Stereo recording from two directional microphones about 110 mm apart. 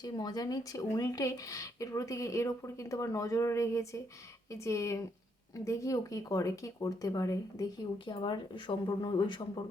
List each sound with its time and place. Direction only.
0.0 s speech: 40° left (ahead or behind)
8.0 s a woman's voice: 45° left (ahead or behind)